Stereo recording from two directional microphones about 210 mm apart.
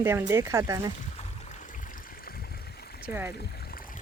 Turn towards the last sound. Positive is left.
turn(degrees=-10)  # may be behind; listen again after turning